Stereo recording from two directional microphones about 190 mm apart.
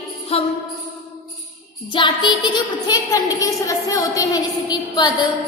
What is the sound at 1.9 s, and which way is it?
A woman's voice, 25° left (ahead or behind).